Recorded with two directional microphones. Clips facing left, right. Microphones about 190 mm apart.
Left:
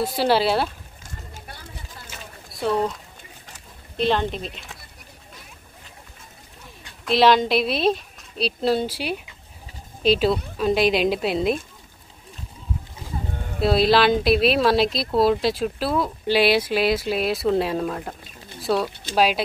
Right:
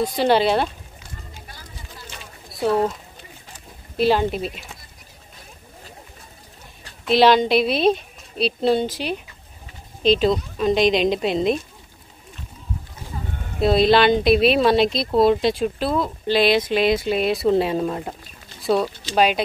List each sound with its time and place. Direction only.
0.0 s speech: 5° left (ahead or behind)
1.0 s run: 45° left (ahead or behind)
2.0 s a sound: centre (ahead or behind)
3.9 s speech: 5° right (ahead or behind)
7.1 s speech: centre (ahead or behind)
13.6 s speech: 5° left (ahead or behind)